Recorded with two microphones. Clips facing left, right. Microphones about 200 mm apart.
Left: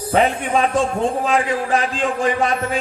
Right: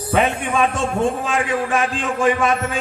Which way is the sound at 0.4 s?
50° right (ahead or behind).